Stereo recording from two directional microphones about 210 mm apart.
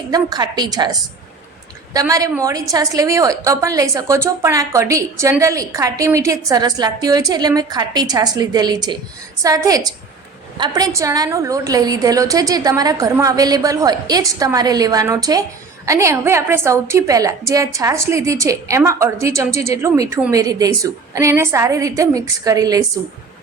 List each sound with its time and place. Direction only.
0.1 s a woman's voice: 20° right (ahead or behind)